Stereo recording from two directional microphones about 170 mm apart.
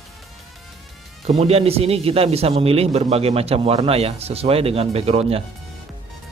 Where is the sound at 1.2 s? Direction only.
35° right (ahead or behind).